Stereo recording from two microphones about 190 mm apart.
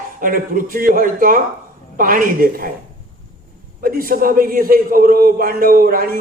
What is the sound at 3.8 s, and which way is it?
A woman's voice, 50° right (ahead or behind).